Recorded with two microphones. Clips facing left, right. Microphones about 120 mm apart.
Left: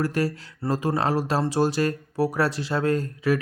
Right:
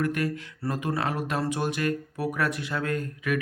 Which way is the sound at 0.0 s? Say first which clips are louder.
Left 2 dB; 35° left (ahead or behind).